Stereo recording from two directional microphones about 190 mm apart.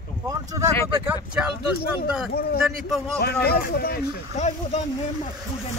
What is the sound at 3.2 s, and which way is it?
Speech, 55° left (ahead or behind).